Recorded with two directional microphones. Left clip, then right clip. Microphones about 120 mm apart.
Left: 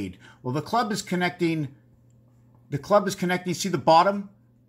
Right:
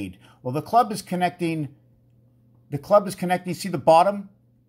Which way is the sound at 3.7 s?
15° right (ahead or behind).